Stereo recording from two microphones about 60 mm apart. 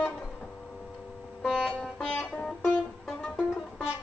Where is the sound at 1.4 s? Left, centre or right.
Centre.